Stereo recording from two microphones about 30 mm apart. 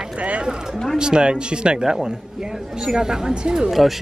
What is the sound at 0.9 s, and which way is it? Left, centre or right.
Speech, right.